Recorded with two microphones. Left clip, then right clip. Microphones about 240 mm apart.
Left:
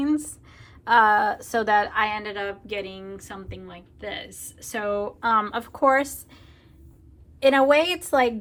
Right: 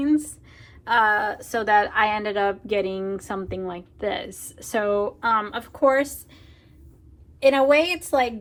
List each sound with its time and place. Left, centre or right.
0.0 s a woman's voice: left
7.3 s a woman's voice: left